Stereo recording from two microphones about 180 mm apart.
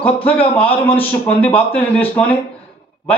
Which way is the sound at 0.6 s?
30° left (ahead or behind).